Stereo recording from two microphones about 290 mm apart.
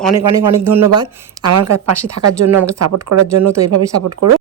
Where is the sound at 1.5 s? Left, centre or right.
Right.